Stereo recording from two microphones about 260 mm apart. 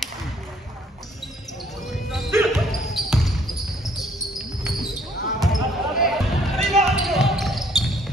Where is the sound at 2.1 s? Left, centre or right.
Centre.